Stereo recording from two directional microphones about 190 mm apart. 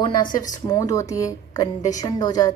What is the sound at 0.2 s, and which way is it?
Speech, 45° left (ahead or behind).